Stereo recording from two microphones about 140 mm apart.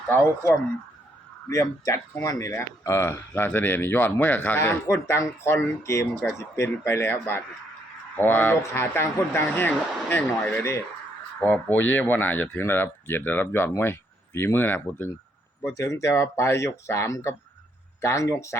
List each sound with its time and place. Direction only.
0.1 s speech: 15° left (ahead or behind)